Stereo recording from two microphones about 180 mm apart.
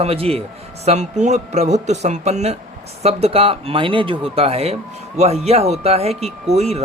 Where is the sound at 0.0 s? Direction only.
35° right (ahead or behind).